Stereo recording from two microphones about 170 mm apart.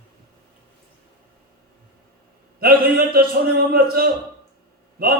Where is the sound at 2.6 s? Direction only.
60° right (ahead or behind).